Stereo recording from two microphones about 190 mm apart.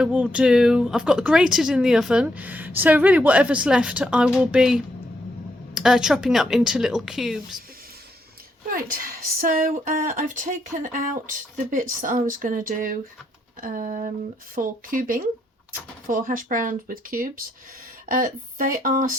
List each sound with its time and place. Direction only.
0.0 s speech: 5° right (ahead or behind)
8.7 s speech: 50° right (ahead or behind)